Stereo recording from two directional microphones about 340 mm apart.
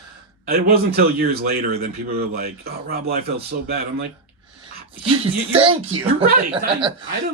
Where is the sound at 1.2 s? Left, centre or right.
Right.